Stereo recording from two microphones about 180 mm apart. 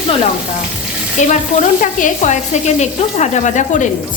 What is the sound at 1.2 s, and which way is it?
A woman's voice, 40° left (ahead or behind).